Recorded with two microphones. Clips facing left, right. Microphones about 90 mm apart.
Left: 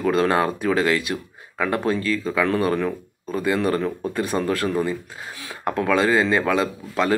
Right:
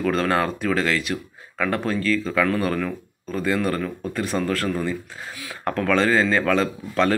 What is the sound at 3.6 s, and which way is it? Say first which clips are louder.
A man's voice: left 3 dB; 25° left (ahead or behind).